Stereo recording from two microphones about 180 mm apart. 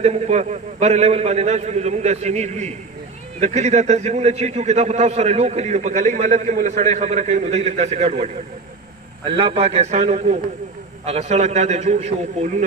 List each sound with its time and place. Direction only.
0.0 s a man's voice: 35° right (ahead or behind)
9.4 s a man's voice: 35° right (ahead or behind)